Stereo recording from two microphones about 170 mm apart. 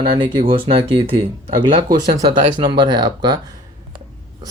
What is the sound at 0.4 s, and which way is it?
Speech, 30° right (ahead or behind).